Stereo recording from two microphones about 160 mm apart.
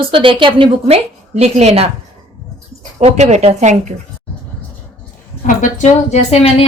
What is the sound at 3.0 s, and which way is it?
Speech, 45° right (ahead or behind).